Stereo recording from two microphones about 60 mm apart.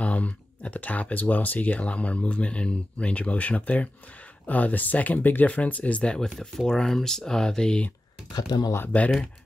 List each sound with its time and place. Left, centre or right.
0.0 s speech: left
6.1 s speech: centre
8.3 s speech: left
8.9 s speech: left